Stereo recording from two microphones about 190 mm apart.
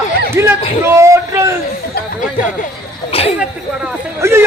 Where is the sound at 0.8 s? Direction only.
15° right (ahead or behind).